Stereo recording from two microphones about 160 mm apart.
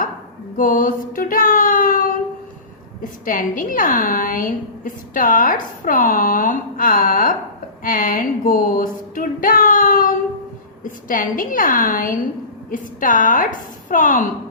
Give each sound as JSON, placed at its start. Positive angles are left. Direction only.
{"t": 0.5, "sound": "a woman's voice", "side_deg": 60}